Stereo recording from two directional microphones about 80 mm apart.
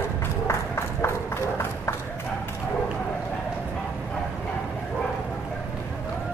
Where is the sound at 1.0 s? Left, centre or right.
Left.